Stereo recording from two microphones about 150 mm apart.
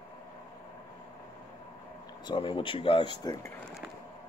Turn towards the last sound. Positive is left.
turn(degrees=30)  # may be behind; listen again after turning